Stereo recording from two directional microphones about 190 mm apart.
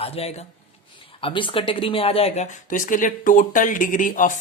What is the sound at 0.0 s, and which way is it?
Speech, 30° left (ahead or behind).